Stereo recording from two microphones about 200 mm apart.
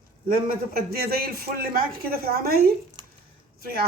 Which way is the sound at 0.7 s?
50° right (ahead or behind).